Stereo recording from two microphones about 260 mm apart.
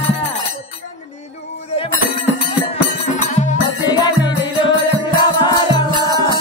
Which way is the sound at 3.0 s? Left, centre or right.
Left.